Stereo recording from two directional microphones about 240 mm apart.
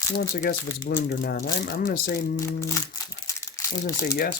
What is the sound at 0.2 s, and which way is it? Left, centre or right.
Speech, left.